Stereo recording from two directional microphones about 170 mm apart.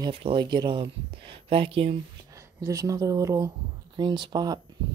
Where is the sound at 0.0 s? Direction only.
35° right (ahead or behind).